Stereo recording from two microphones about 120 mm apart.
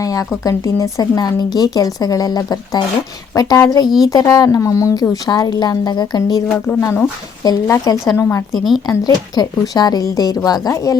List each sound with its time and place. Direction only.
0.0 s a woman's voice: 30° left (ahead or behind)
6.8 s a woman's voice: 20° left (ahead or behind)
7.4 s a woman's voice: 30° left (ahead or behind)
8.1 s a woman's voice: 20° left (ahead or behind)
8.5 s speech: centre (ahead or behind)
8.9 s a woman's voice: 35° left (ahead or behind)